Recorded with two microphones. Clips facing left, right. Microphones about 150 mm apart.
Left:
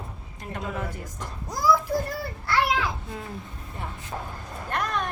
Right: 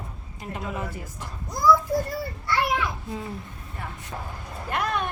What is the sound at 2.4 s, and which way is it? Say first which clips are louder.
Children playing: left 1 dB; 90° left.